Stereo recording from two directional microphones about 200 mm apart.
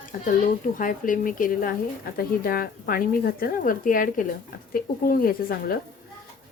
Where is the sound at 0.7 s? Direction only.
40° left (ahead or behind).